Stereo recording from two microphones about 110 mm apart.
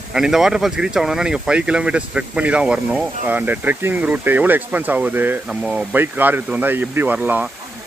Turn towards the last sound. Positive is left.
turn(degrees=-15)  # may be behind; listen again after turning